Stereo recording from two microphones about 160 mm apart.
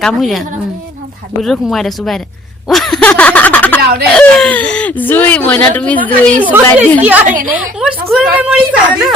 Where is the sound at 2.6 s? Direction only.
5° left (ahead or behind).